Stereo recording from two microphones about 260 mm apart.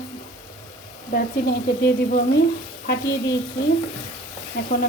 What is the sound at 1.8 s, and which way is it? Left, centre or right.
Speech, left.